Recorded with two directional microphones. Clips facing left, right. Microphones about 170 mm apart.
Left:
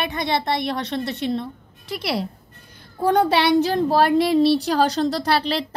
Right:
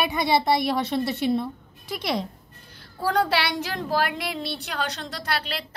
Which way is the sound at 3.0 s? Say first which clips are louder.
Left 6 dB; 20° left (ahead or behind).